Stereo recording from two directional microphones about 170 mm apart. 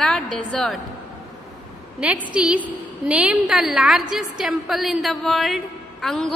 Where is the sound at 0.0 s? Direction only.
5° left (ahead or behind).